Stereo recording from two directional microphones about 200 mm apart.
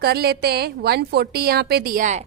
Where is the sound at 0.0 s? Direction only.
55° right (ahead or behind).